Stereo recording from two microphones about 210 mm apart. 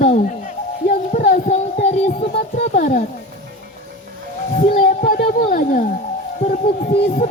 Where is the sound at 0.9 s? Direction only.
40° left (ahead or behind).